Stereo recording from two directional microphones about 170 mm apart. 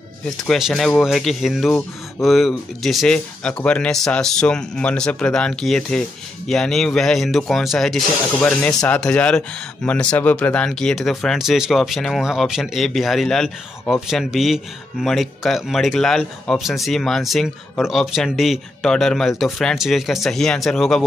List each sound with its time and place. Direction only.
0.4 s speech: centre (ahead or behind)